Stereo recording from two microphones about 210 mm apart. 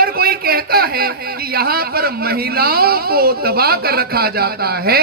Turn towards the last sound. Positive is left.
turn(degrees=-45)  # may be behind; listen again after turning